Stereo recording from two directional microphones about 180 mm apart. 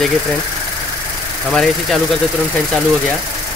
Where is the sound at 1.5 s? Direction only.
Centre (ahead or behind).